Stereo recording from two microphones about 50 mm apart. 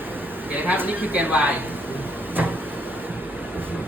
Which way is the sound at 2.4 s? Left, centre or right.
Right.